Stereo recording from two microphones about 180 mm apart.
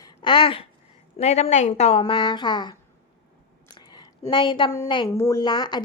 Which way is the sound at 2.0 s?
25° left (ahead or behind).